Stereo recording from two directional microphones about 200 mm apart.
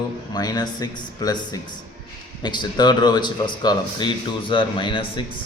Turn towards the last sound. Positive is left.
turn(degrees=25)  # may be behind; listen again after turning